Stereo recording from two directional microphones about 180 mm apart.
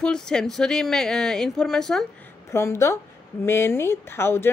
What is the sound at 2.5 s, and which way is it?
A woman's voice, 15° left (ahead or behind).